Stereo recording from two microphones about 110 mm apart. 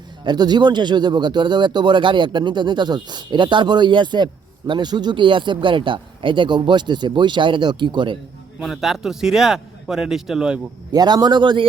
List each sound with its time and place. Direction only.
0.3 s speech: 40° right (ahead or behind)
8.6 s a man's voice: centre (ahead or behind)
10.9 s speech: 40° right (ahead or behind)